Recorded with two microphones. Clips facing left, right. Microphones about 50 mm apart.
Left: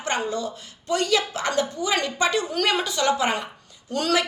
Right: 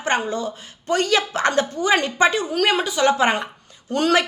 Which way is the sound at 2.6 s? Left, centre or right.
Centre.